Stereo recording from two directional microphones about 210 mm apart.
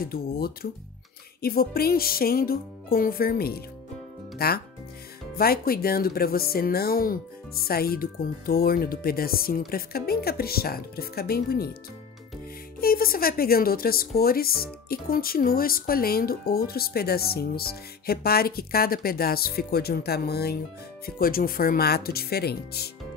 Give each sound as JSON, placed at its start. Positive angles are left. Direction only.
{"t": 0.0, "sound": "speech", "side_deg": 45}
{"t": 12.8, "sound": "speech", "side_deg": 45}